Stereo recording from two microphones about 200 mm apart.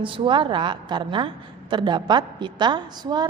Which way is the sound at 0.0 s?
25° right (ahead or behind).